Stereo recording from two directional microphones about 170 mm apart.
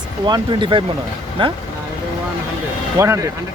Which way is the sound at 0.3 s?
25° right (ahead or behind).